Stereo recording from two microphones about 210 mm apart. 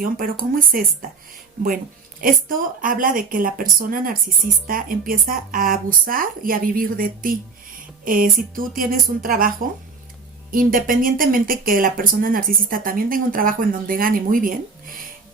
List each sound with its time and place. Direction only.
0.0 s speech: 40° right (ahead or behind)
2.2 s speech: 40° right (ahead or behind)
10.5 s speech: 40° right (ahead or behind)